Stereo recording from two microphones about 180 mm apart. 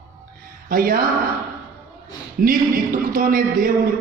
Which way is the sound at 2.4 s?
50° right (ahead or behind).